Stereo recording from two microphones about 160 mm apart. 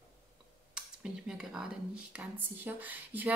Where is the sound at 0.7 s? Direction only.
5° right (ahead or behind).